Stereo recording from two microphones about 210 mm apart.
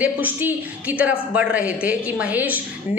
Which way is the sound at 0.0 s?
10° right (ahead or behind).